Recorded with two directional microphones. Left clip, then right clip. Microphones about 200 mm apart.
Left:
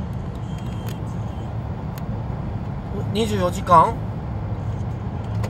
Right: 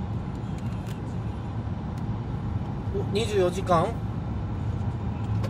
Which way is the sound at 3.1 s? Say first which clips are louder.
Left 2 dB; 20° left (ahead or behind).